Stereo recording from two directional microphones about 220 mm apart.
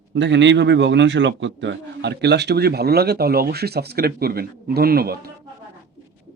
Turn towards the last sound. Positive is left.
turn(degrees=-45)  # may be behind; listen again after turning